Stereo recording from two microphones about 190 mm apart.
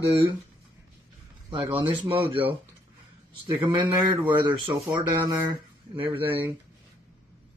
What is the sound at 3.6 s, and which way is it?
Speech, 25° right (ahead or behind).